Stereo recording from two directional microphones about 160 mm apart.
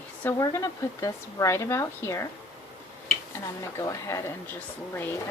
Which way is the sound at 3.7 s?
15° left (ahead or behind).